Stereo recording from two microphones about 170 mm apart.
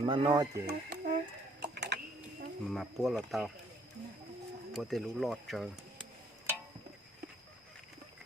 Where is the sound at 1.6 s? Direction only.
80° right.